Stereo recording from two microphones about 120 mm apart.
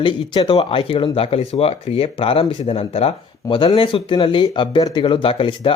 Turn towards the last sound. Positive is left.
turn(degrees=45)  # may be behind; listen again after turning